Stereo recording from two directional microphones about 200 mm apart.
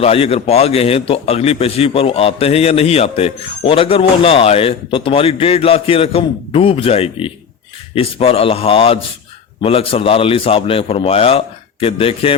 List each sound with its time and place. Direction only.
0.0 s a man's voice: 30° left (ahead or behind)